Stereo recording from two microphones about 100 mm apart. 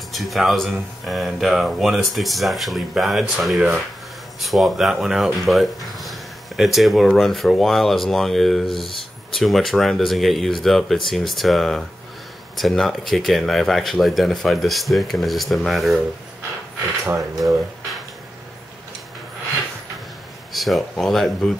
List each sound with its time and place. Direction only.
0.1 s speech: centre (ahead or behind)
17.2 s speech: 35° right (ahead or behind)
20.5 s speech: centre (ahead or behind)